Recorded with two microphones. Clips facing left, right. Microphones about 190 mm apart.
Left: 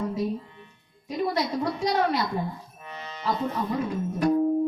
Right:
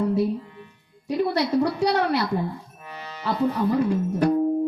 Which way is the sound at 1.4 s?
70° right (ahead or behind).